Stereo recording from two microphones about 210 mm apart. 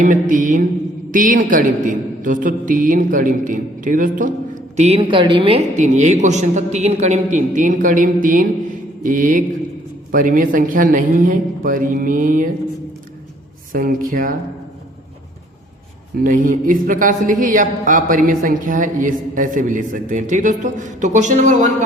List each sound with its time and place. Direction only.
0.0 s a man's voice: 40° right (ahead or behind)
13.7 s a man's voice: 40° right (ahead or behind)
16.1 s a man's voice: 40° right (ahead or behind)